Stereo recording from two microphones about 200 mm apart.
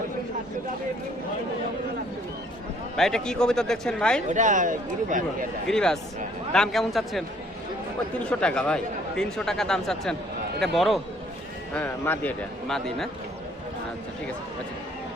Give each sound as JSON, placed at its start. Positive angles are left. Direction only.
{"t": 2.9, "sound": "speech", "side_deg": 5}
{"t": 4.3, "sound": "speech", "side_deg": -40}
{"t": 5.6, "sound": "speech", "side_deg": 5}